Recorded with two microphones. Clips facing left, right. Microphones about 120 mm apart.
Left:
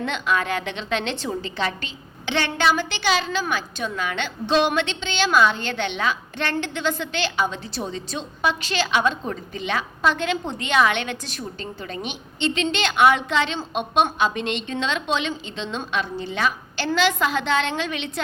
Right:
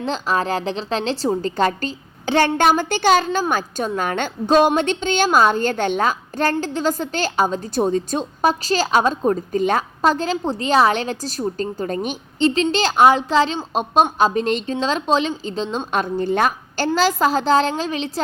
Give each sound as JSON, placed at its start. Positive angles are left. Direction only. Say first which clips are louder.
{"t": 0.0, "sound": "a woman's voice", "louder": "right 3 dB", "side_deg": -35}
{"t": 15.9, "sound": "a woman's voice", "louder": "right 7 dB", "side_deg": -45}